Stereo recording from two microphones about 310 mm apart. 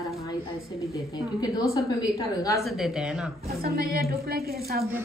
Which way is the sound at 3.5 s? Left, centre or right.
Right.